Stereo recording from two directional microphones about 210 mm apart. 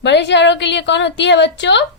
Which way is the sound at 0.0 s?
55° left (ahead or behind).